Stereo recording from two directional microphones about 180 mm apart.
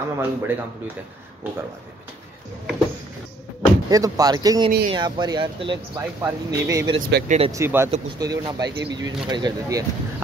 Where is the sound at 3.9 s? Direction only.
20° right (ahead or behind).